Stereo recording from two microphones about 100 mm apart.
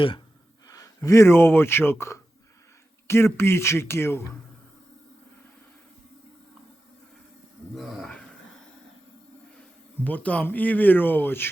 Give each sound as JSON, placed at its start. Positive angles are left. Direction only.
{"t": 0.7, "sound": "speech", "side_deg": 35}
{"t": 7.8, "sound": "a sound", "side_deg": 0}
{"t": 9.6, "sound": "speech", "side_deg": 15}